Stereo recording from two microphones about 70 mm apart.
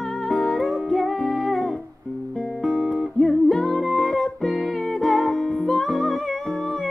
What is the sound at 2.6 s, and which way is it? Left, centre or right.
Guitar, centre.